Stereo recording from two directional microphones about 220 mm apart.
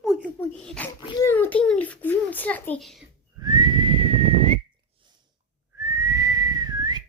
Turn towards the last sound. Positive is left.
turn(degrees=-20)  # may be behind; listen again after turning